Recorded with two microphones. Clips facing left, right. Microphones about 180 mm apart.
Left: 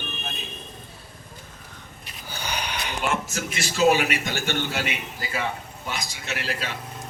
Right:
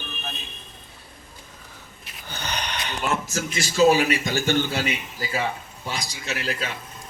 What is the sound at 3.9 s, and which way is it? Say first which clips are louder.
A man's voice: right 2 dB; 35° right (ahead or behind).